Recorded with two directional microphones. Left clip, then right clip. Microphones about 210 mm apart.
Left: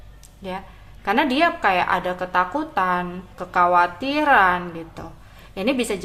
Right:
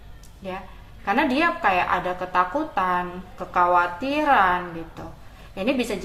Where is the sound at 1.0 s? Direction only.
30° left (ahead or behind).